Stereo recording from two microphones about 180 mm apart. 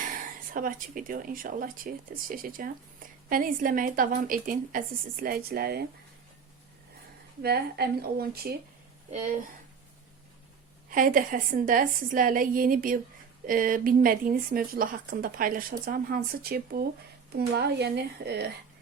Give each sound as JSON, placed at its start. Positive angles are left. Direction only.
{"t": 0.5, "sound": "a woman's voice", "side_deg": -50}
{"t": 7.4, "sound": "a woman's voice", "side_deg": -60}
{"t": 9.0, "sound": "speech", "side_deg": -40}
{"t": 10.8, "sound": "a woman's voice", "side_deg": -50}